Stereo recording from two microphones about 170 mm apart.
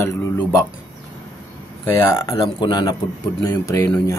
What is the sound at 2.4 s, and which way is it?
A man's voice, 25° left (ahead or behind).